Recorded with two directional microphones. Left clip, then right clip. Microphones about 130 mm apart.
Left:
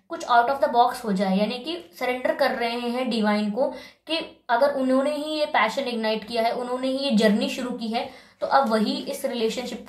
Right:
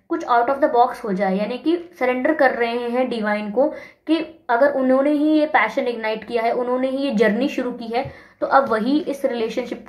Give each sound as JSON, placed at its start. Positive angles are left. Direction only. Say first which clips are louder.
{"t": 0.2, "sound": "a woman's voice", "louder": "right 2 dB", "side_deg": -35}